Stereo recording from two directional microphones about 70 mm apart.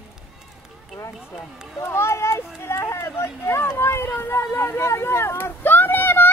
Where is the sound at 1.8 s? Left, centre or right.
Left.